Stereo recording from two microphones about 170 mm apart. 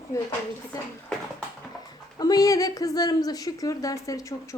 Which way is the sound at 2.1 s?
20° left (ahead or behind).